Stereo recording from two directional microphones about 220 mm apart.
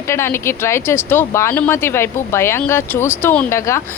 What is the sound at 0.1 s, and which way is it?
A woman's voice, 10° left (ahead or behind).